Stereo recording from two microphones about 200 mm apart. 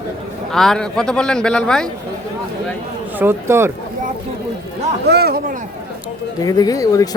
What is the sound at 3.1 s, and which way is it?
Speech, 10° right (ahead or behind).